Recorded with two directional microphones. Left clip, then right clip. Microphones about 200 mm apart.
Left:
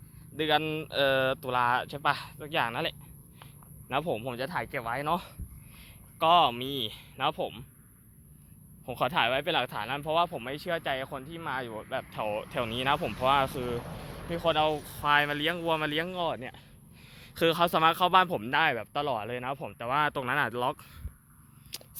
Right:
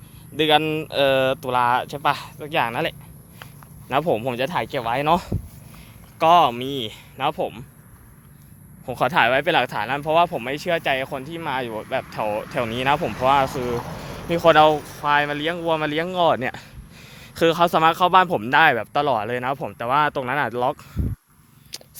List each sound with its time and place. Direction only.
0.3 s speech: 15° right (ahead or behind)
6.1 s speech: 10° right (ahead or behind)
8.9 s speech: 10° right (ahead or behind)
13.0 s speech: 40° right (ahead or behind)
13.2 s speech: centre (ahead or behind)
13.7 s speech: 25° right (ahead or behind)
14.9 s speech: centre (ahead or behind)
16.1 s speech: 25° right (ahead or behind)
17.2 s speech: 10° right (ahead or behind)
21.7 s a sound: 20° right (ahead or behind)